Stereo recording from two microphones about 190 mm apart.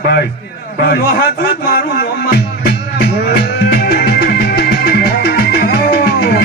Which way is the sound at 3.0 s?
55° left (ahead or behind).